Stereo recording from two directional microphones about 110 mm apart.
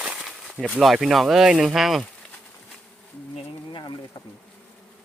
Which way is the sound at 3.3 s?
45° left (ahead or behind).